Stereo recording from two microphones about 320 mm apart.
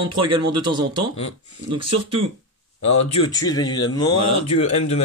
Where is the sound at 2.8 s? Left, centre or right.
Left.